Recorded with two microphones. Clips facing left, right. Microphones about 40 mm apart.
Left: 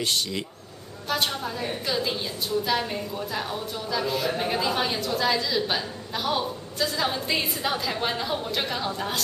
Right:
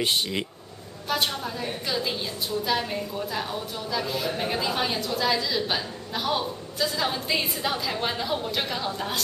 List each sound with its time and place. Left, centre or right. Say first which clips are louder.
0.0 s a man's voice: right 2 dB; right
1.0 s a woman's voice: even; centre